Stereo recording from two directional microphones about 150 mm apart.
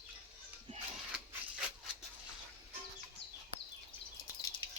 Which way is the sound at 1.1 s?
5° right (ahead or behind).